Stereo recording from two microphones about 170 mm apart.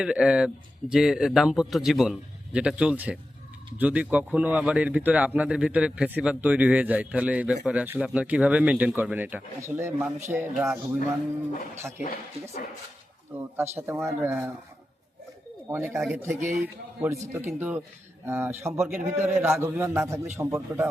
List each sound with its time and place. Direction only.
0.0 s a man's voice: 5° right (ahead or behind)
11.8 s speech: 15° right (ahead or behind)
13.3 s speech: 15° right (ahead or behind)
15.7 s speech: 15° right (ahead or behind)